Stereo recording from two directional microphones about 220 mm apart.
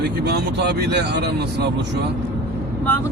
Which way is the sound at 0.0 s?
45° right (ahead or behind).